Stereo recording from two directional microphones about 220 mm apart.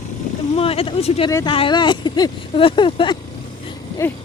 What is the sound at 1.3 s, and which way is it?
Speech, 15° left (ahead or behind).